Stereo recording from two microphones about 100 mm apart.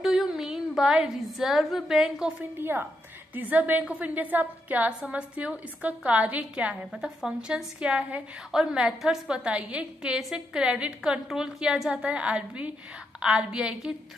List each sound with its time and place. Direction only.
0.0 s a woman's voice: 5° right (ahead or behind)
2.6 s a woman's voice: 20° right (ahead or behind)
6.7 s a woman's voice: 5° right (ahead or behind)